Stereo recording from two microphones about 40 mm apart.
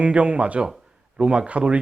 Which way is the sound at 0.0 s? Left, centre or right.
Right.